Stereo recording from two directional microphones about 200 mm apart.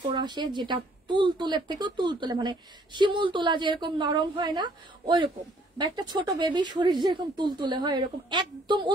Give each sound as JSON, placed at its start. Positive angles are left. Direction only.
{"t": 0.0, "sound": "speech", "side_deg": -20}